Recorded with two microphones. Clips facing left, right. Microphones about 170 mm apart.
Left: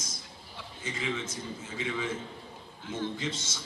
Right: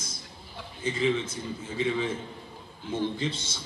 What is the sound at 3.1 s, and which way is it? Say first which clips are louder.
Speech: right 3 dB; 30° right (ahead or behind).